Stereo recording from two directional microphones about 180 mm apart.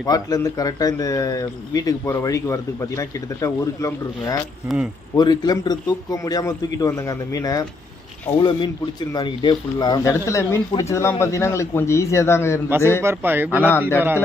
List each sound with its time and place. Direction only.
0.0 s speech: 20° left (ahead or behind)
13.0 s speech: 10° right (ahead or behind)
13.7 s speech: 10° left (ahead or behind)